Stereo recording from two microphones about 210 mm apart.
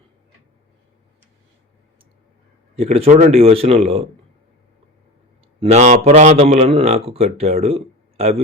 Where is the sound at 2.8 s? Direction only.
30° right (ahead or behind).